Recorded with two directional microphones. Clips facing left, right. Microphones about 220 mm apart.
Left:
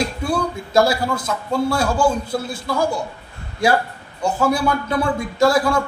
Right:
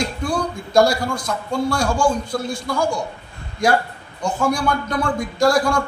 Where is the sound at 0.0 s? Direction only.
5° left (ahead or behind).